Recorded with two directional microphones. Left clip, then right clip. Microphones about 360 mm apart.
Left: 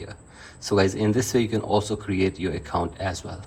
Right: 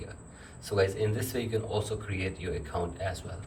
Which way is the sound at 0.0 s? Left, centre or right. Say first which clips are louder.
Left 6 dB; centre.